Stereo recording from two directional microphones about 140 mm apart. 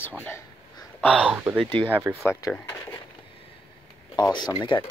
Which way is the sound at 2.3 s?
20° left (ahead or behind).